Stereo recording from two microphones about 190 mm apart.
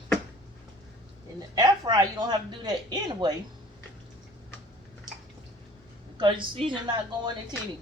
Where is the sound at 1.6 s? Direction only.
20° right (ahead or behind).